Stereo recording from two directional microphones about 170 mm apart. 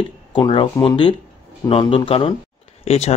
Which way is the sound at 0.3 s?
30° left (ahead or behind).